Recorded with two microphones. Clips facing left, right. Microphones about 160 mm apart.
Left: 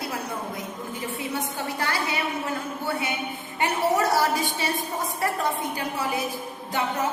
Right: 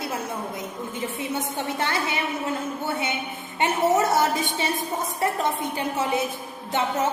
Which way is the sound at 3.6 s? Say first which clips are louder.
Right 2 dB; 20° right (ahead or behind).